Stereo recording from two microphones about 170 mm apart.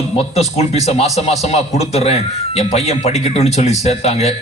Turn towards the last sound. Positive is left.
turn(degrees=40)  # may be behind; listen again after turning